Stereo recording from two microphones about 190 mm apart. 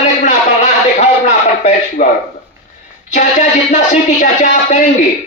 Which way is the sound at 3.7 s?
40° left (ahead or behind).